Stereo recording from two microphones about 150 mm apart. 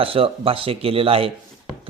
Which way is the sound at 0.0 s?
40° right (ahead or behind).